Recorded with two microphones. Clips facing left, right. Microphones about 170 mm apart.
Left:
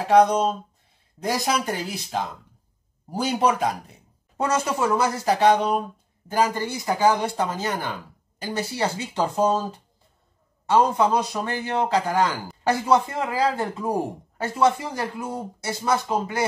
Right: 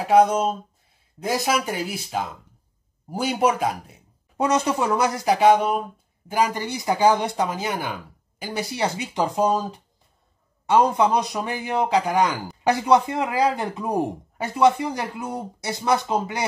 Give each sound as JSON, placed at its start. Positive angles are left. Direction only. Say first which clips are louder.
{"t": 0.1, "sound": "speech", "louder": "even", "side_deg": -5}
{"t": 4.4, "sound": "speech", "louder": "right 2 dB", "side_deg": -20}